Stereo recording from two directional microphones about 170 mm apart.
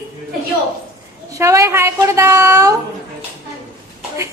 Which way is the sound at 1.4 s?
15° right (ahead or behind).